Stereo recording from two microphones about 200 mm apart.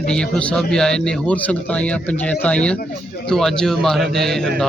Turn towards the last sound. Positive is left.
turn(degrees=0)  # may be behind; listen again after turning